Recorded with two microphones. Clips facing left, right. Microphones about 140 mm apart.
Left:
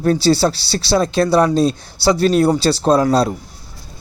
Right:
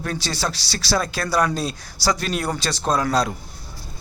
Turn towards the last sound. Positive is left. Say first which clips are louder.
# left 7 dB
turn(degrees=30)  # may be behind; listen again after turning